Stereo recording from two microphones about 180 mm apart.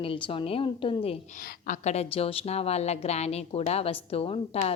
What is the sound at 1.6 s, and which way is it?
A woman's voice, 40° left (ahead or behind).